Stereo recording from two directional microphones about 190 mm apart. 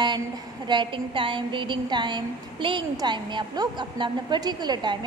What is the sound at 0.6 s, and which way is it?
A woman's voice, 25° right (ahead or behind).